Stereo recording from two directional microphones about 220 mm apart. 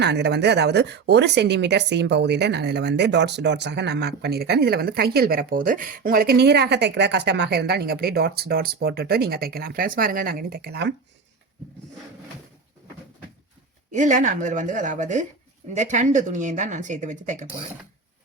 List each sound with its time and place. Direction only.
0.0 s speech: 50° right (ahead or behind)
13.9 s speech: 35° right (ahead or behind)